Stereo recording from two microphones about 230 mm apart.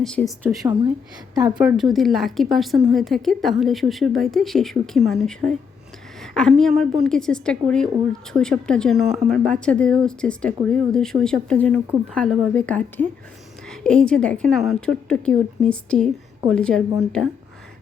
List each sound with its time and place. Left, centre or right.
0.0 s a woman's voice: centre
0.6 s speech: right
1.5 s a woman's voice: centre